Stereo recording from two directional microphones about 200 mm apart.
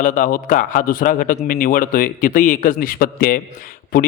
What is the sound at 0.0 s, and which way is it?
A man's voice, 40° left (ahead or behind).